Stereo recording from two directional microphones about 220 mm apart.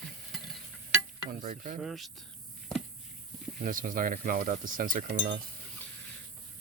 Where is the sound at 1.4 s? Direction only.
35° right (ahead or behind).